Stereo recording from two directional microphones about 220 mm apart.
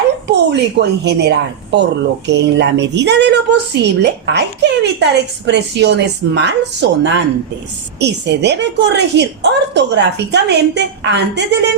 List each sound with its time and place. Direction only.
0.3 s a woman's voice: 50° right (ahead or behind)